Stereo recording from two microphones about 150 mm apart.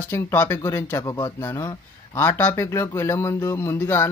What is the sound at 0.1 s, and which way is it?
Speech, 15° left (ahead or behind).